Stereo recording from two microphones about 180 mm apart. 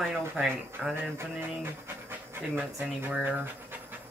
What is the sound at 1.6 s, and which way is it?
Pant, 15° right (ahead or behind).